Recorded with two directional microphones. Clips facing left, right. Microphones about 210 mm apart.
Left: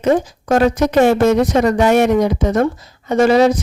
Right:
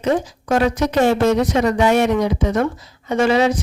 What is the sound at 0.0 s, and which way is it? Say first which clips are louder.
Speech: left 4 dB; 45° left (ahead or behind).